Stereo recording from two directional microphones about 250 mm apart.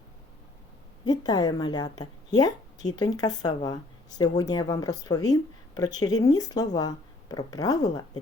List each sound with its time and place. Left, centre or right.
1.0 s a woman's voice: centre